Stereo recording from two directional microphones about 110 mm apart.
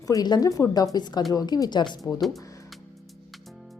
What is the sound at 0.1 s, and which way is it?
A woman's voice, 35° left (ahead or behind).